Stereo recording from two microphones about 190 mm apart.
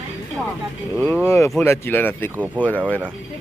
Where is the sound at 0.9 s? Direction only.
10° left (ahead or behind).